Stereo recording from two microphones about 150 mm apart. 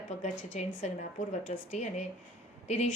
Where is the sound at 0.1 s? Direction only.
50° left (ahead or behind).